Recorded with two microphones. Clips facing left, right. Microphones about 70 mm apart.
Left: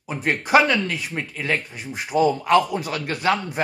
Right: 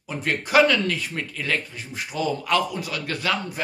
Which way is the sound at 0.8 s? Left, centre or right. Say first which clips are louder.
Even; centre.